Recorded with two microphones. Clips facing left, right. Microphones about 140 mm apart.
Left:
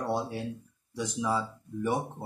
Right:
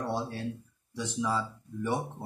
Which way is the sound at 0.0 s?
15° left (ahead or behind).